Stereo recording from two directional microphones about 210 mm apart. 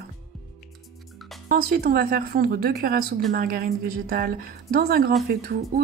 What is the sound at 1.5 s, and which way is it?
Speech, 45° right (ahead or behind).